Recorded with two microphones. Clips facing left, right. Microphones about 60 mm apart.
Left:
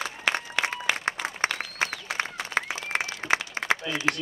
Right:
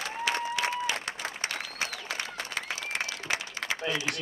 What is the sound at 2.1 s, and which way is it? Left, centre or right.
Applause, left.